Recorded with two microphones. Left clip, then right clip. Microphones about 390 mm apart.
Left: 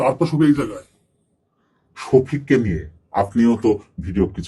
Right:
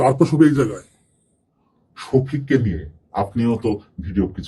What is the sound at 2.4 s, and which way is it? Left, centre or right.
Speech, left.